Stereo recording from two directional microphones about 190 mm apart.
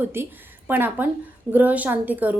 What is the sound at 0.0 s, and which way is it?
A woman's voice, 10° right (ahead or behind).